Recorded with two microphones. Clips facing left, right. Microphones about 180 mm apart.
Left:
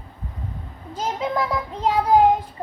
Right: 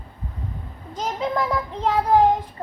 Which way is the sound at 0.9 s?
5° left (ahead or behind).